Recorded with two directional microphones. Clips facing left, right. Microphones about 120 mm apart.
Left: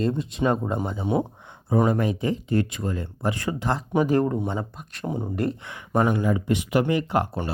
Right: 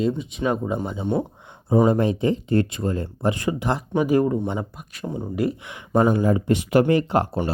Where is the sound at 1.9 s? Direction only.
30° right (ahead or behind); by 5.1 s 5° right (ahead or behind).